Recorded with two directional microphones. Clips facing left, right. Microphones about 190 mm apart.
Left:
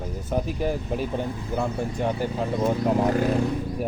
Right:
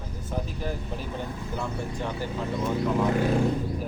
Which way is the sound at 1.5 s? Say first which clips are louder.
Left 6 dB; 50° left (ahead or behind).